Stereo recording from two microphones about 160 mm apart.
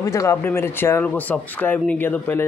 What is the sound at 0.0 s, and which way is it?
Speech, 20° left (ahead or behind).